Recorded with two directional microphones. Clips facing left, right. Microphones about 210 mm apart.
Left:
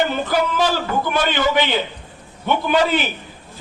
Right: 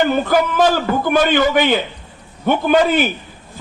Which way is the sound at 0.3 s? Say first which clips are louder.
Right 4 dB; 50° right (ahead or behind).